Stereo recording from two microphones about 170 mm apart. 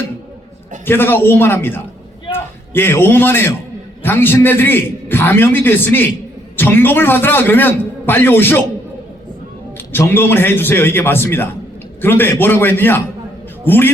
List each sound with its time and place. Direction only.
0.9 s a man's voice: 10° left (ahead or behind)
9.7 s a man's voice: 10° left (ahead or behind)